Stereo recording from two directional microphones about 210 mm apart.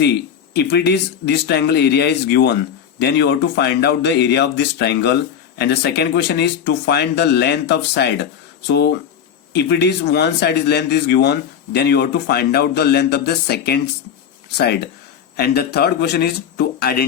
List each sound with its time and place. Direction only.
0.5 s speech: 50° left (ahead or behind)
15.4 s speech: 50° left (ahead or behind)